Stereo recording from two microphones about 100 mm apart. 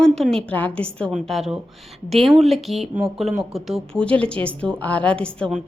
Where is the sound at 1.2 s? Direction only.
Centre (ahead or behind).